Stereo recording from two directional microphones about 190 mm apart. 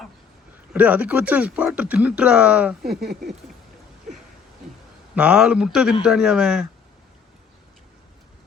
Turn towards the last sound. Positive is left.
turn(degrees=-5)  # may be behind; listen again after turning